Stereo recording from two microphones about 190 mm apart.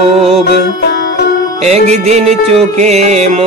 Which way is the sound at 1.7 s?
35° right (ahead or behind).